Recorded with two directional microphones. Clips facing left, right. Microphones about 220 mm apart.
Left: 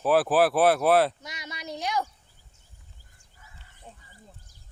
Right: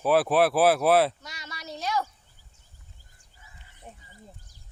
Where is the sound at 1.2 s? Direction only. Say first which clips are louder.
Left 3 dB; 20° left (ahead or behind).